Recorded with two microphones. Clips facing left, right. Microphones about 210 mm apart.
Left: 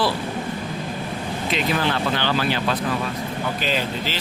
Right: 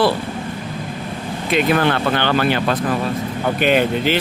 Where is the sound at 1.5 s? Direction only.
55° right (ahead or behind).